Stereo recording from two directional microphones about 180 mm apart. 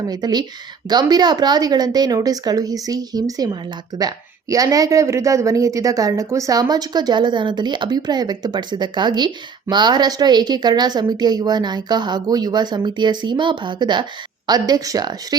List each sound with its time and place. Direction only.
0.1 s a woman's voice: 20° right (ahead or behind)